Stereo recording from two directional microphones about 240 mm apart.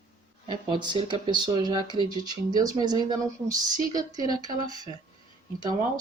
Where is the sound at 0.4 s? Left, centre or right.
Centre.